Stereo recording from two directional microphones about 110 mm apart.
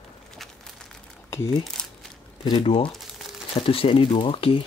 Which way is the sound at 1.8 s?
5° left (ahead or behind).